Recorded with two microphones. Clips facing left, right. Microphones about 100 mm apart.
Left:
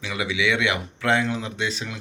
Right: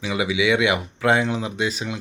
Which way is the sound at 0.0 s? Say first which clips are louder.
Right 4 dB; 20° right (ahead or behind).